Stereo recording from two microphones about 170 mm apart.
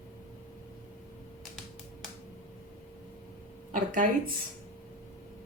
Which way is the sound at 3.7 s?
50° right (ahead or behind).